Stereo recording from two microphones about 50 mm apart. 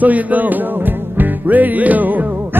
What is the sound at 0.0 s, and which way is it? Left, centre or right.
Music, right.